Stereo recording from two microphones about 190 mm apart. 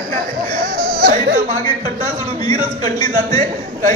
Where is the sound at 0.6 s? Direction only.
50° right (ahead or behind).